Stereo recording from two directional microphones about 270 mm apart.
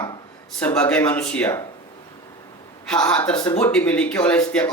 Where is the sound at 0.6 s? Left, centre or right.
Centre.